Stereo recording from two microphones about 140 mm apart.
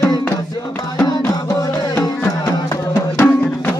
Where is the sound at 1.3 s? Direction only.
25° left (ahead or behind).